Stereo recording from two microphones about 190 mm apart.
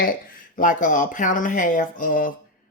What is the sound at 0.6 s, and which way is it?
Speech, 45° left (ahead or behind).